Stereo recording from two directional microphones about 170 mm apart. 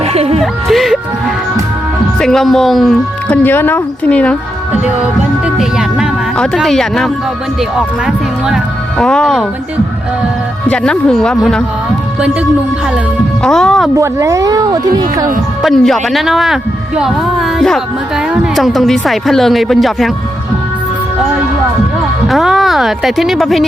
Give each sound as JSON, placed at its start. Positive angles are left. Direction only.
{"t": 0.0, "sound": "music", "side_deg": -35}
{"t": 0.7, "sound": "music", "side_deg": 0}
{"t": 2.2, "sound": "speech", "side_deg": 0}
{"t": 5.5, "sound": "speech", "side_deg": 0}
{"t": 10.7, "sound": "speech", "side_deg": 5}
{"t": 13.4, "sound": "speech", "side_deg": 5}
{"t": 13.9, "sound": "speech", "side_deg": -20}
{"t": 15.6, "sound": "speech", "side_deg": 0}
{"t": 22.3, "sound": "speech", "side_deg": 0}